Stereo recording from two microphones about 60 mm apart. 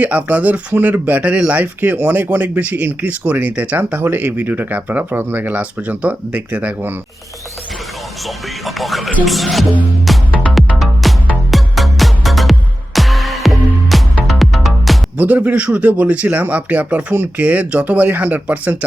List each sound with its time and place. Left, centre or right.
0.0 s speech: right
8.6 s speech: centre
10.1 s music: centre
15.2 s speech: right